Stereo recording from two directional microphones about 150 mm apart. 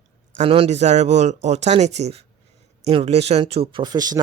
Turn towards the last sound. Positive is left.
turn(degrees=-25)  # may be behind; listen again after turning